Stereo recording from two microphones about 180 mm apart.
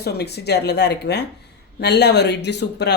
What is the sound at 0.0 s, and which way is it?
Speech, 65° left (ahead or behind).